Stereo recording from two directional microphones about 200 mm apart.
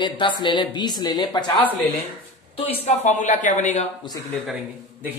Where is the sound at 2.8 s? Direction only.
35° left (ahead or behind).